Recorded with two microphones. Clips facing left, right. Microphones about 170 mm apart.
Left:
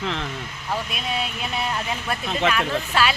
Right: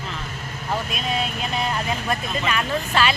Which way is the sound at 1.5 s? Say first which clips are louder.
Right 2 dB; 5° left (ahead or behind).